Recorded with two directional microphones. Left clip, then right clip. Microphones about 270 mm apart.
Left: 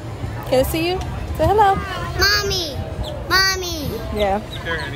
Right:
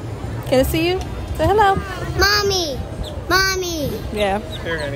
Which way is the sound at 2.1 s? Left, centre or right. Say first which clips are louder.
Right 2 dB; centre.